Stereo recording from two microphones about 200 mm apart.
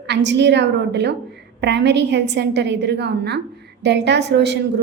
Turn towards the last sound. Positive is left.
turn(degrees=-60)  # may be behind; listen again after turning